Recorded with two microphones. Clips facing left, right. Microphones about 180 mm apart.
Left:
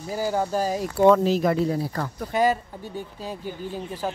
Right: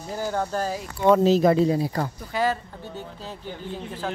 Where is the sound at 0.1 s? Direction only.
10° left (ahead or behind).